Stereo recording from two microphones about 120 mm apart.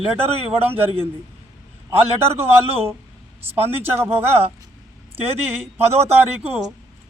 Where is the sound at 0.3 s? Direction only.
55° right (ahead or behind).